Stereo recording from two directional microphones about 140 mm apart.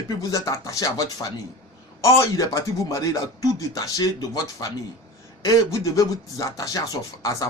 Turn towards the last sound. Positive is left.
turn(degrees=25)  # may be behind; listen again after turning